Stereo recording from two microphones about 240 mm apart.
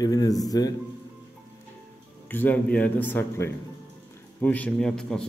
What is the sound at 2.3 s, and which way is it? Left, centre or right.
A man's voice, centre.